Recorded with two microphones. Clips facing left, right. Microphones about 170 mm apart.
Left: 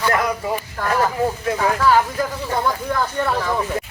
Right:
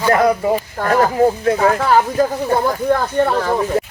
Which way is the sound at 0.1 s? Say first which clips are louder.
Right 7 dB; 40° right (ahead or behind).